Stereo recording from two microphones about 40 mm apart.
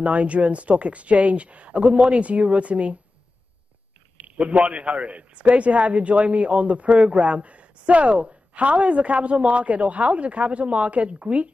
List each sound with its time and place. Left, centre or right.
0.0 s a man's voice: right
4.4 s a man's voice: right